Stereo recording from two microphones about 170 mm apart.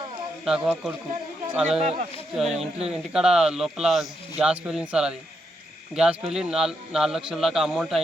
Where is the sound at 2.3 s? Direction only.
5° right (ahead or behind).